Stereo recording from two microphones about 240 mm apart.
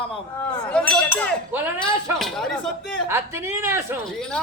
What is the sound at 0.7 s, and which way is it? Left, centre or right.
Speech, centre.